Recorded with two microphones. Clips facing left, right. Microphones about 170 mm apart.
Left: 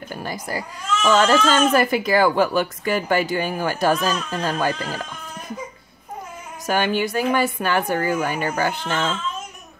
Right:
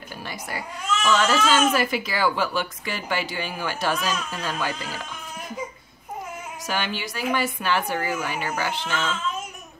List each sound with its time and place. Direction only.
0.1 s speech: 45° left (ahead or behind)
6.6 s speech: 50° left (ahead or behind)